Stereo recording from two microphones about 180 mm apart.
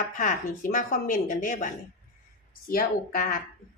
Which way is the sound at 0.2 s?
50° left (ahead or behind).